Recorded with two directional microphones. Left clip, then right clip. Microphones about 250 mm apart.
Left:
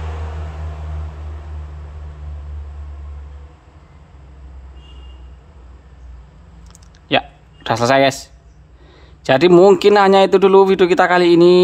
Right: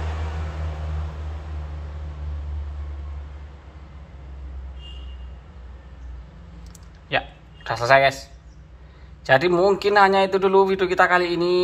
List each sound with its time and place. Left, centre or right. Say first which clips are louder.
7.1 s a man's voice: left 7 dB; left